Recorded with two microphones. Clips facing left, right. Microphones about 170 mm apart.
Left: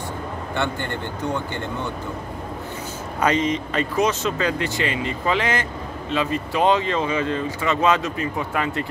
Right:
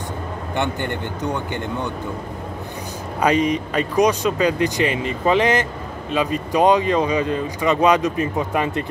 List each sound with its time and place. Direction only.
0.6 s speech: 15° right (ahead or behind)
3.2 s speech: 15° right (ahead or behind)